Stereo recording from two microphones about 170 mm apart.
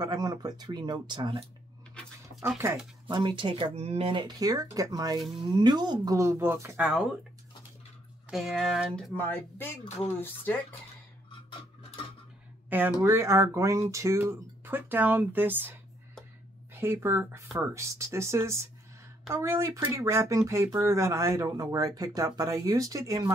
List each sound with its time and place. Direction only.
0.0 s speech: 25° right (ahead or behind)
2.4 s speech: 15° right (ahead or behind)
3.1 s speech: 30° right (ahead or behind); by 7.1 s 5° right (ahead or behind)
8.3 s speech: centre (ahead or behind)
9.1 s speech: 10° left (ahead or behind)
12.6 s speech: 10° right (ahead or behind)
16.7 s speech: 15° right (ahead or behind)